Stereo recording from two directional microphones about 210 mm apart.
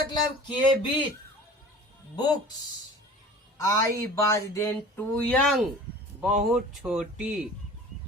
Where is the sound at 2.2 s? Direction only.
20° left (ahead or behind).